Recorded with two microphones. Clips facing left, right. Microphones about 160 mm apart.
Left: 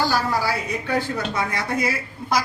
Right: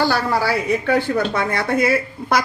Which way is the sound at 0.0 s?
65° right (ahead or behind).